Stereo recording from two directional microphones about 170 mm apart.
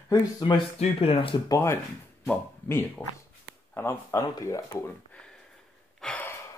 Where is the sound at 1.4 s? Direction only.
15° left (ahead or behind).